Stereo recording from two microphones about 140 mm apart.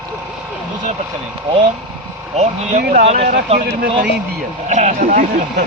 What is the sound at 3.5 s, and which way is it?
Speech, 90° right.